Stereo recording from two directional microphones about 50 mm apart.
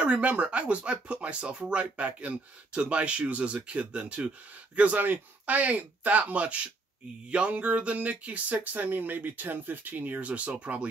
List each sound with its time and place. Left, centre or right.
0.0 s speech: right
5.0 s speech: right